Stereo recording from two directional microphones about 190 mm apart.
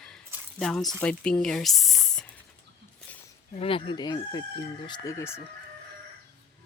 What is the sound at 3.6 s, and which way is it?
Chicken, 25° left (ahead or behind).